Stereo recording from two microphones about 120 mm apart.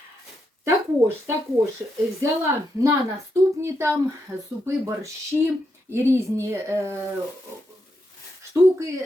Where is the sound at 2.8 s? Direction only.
20° right (ahead or behind).